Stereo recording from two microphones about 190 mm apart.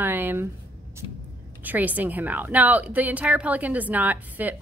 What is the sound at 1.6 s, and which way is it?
A woman's voice, 10° right (ahead or behind).